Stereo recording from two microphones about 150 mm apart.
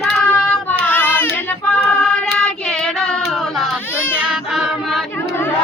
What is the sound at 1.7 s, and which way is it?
Music, 5° left (ahead or behind).